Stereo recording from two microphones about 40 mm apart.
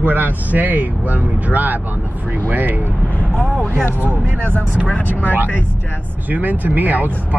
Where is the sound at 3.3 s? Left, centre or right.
Left.